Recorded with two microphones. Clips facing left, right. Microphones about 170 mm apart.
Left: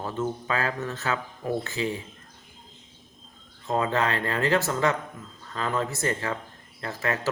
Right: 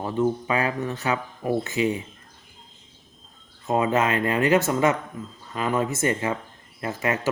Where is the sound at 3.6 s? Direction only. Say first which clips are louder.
Right 3 dB; 20° right (ahead or behind).